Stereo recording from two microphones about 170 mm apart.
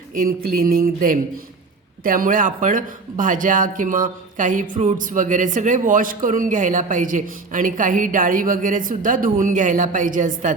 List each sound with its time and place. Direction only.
0.1 s speech: 55° right (ahead or behind)